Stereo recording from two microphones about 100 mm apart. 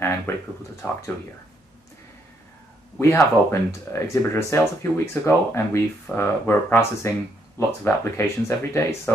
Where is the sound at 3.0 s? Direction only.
30° left (ahead or behind).